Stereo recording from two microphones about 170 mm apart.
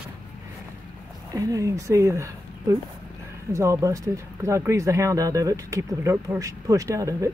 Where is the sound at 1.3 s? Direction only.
20° right (ahead or behind).